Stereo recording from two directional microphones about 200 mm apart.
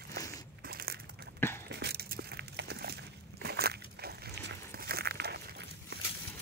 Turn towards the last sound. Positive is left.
turn(degrees=-55)  # may be behind; listen again after turning